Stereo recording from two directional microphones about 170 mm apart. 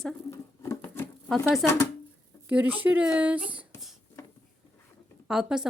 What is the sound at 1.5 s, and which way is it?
Speech, 15° left (ahead or behind).